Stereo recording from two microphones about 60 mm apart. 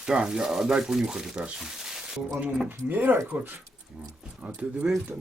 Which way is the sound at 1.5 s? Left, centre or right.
Centre.